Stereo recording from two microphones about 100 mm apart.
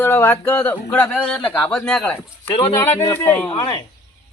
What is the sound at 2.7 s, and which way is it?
Speech, 30° left (ahead or behind).